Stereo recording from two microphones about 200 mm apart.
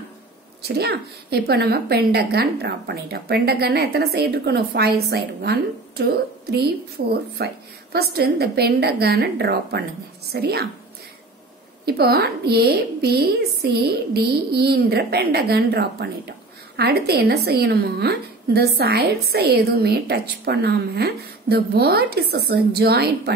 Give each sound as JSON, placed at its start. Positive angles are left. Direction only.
{"t": 0.7, "sound": "a woman's voice", "side_deg": -55}
{"t": 7.0, "sound": "speech", "side_deg": -40}
{"t": 7.4, "sound": "a woman's voice", "side_deg": -55}
{"t": 11.8, "sound": "a woman's voice", "side_deg": -50}